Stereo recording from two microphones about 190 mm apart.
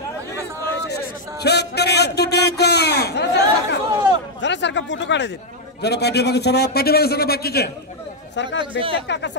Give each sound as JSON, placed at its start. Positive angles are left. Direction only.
{"t": 1.4, "sound": "a sound", "side_deg": 60}
{"t": 4.4, "sound": "a man's voice", "side_deg": 70}
{"t": 8.4, "sound": "speech", "side_deg": 70}
{"t": 8.7, "sound": "speech", "side_deg": -30}
{"t": 9.0, "sound": "a man's voice", "side_deg": 65}